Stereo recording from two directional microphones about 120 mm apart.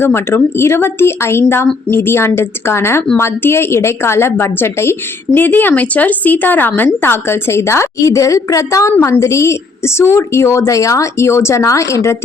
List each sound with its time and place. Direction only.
0.0 s a woman's voice: 20° left (ahead or behind)